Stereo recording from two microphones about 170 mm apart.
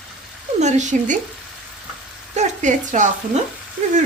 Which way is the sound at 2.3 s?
45° right (ahead or behind).